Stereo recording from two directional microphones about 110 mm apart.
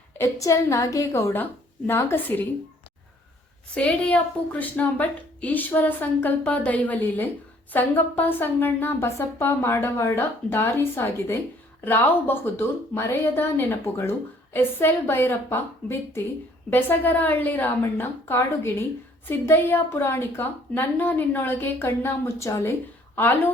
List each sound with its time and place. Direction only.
0.2 s a woman's voice: 25° left (ahead or behind)
3.8 s a woman's voice: 10° left (ahead or behind); by 22.7 s 30° left (ahead or behind)
23.1 s a woman's voice: 15° left (ahead or behind)